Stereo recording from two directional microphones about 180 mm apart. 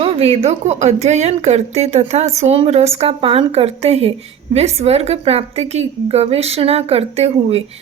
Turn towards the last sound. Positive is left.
turn(degrees=-35)  # may be behind; listen again after turning